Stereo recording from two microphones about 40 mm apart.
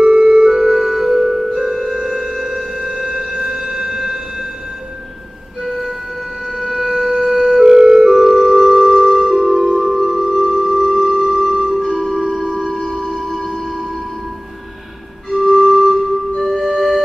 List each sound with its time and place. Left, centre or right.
0.0 s music: centre
2.4 s a sound: centre
5.6 s music: centre
7.6 s music: centre
8.1 s music: centre
11.1 s music: centre
15.2 s music: centre